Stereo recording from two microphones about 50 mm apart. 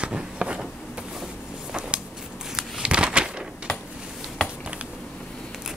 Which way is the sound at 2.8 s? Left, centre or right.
Right.